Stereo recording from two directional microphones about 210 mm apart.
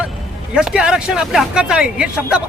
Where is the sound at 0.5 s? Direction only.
5° right (ahead or behind).